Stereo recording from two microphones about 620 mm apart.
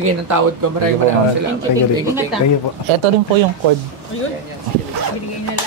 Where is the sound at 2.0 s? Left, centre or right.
Centre.